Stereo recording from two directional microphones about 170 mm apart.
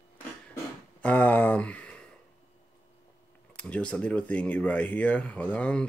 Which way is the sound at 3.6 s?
5° left (ahead or behind).